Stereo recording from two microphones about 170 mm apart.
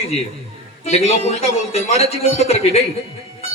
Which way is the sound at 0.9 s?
35° left (ahead or behind).